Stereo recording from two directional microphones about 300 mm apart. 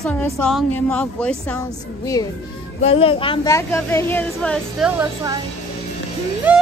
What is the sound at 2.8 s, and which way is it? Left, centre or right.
Speech, centre.